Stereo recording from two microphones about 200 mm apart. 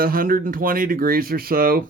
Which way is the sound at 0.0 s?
45° right (ahead or behind).